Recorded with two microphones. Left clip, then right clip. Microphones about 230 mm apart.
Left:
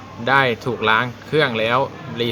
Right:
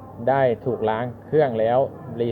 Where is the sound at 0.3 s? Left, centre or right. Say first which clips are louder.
Left 3 dB; left.